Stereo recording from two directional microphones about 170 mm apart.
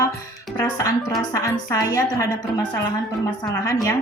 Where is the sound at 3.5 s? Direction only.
20° left (ahead or behind).